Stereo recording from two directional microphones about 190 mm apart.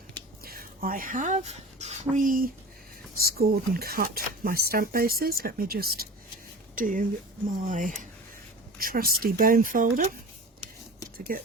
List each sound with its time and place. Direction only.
0.4 s speech: 50° right (ahead or behind)
11.3 s speech: 50° right (ahead or behind)